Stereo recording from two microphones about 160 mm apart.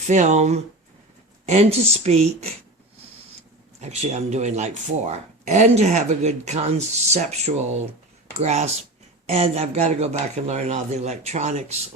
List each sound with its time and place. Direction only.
0.0 s speech: 50° right (ahead or behind)
3.8 s speech: 45° right (ahead or behind)